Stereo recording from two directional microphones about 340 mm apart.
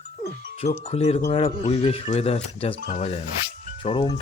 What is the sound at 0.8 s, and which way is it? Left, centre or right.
Speech, centre.